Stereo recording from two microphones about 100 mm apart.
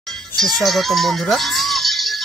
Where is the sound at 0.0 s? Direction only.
5° left (ahead or behind).